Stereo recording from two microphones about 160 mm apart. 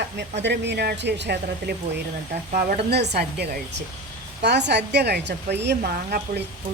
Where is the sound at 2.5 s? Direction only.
60° right (ahead or behind); by 6.4 s 80° right.